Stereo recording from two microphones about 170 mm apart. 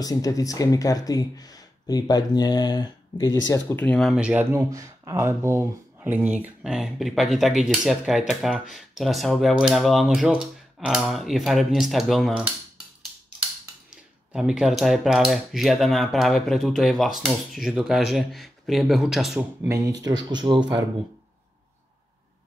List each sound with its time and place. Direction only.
0.0 s speech: 20° left (ahead or behind)
3.7 s speech: 5° left (ahead or behind)
13.8 s speech: 5° right (ahead or behind)
19.7 s speech: 20° right (ahead or behind)